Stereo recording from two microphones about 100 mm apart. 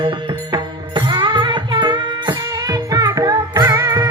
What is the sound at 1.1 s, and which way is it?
Music, 50° right (ahead or behind).